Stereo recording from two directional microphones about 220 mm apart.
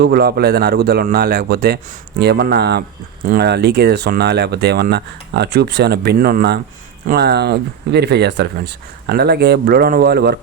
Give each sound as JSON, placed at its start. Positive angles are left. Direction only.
{"t": 0.0, "sound": "speech", "side_deg": -45}